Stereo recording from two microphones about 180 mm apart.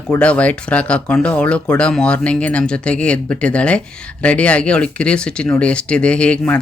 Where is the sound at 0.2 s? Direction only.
5° left (ahead or behind).